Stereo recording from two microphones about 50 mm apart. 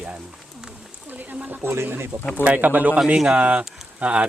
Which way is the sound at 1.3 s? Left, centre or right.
Right.